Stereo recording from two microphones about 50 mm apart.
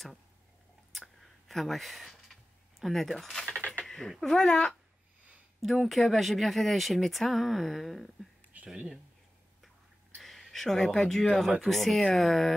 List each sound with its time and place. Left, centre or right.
0.9 s clicking: centre
2.8 s speech: centre
3.4 s cutlery: left
3.8 s a sound: centre
4.2 s speech: centre
8.5 s a sound: right
10.1 s speech: centre